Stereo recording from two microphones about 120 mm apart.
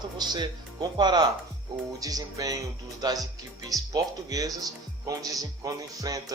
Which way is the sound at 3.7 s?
30° right (ahead or behind).